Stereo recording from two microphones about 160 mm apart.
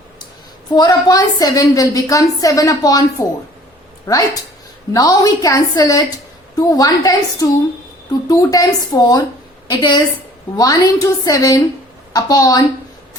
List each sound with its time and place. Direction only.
0.7 s a woman's voice: 25° left (ahead or behind)